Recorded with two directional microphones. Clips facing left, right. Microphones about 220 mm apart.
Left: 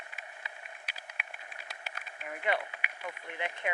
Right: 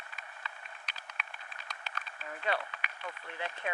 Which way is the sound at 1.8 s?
15° left (ahead or behind).